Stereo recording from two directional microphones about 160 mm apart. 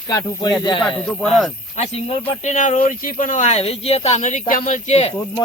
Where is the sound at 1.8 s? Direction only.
45° left (ahead or behind).